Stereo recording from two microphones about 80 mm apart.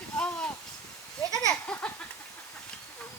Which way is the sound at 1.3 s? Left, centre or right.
Left.